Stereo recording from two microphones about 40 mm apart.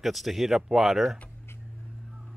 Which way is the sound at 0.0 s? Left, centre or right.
Centre.